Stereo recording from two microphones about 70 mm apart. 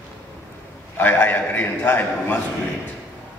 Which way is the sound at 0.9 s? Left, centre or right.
Left.